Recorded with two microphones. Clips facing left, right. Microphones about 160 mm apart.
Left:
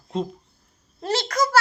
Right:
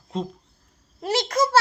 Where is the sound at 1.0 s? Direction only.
15° right (ahead or behind).